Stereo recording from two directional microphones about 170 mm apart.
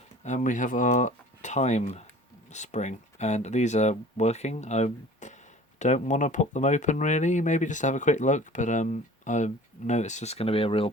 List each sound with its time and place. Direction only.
0.3 s speech: 50° left (ahead or behind)